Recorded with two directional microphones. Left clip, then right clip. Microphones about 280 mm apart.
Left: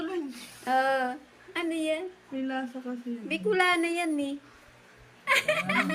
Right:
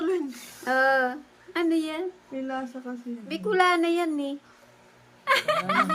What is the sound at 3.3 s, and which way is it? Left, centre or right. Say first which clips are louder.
Speech: right 3 dB; centre.